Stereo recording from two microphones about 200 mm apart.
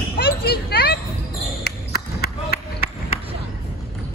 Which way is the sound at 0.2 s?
50° left (ahead or behind).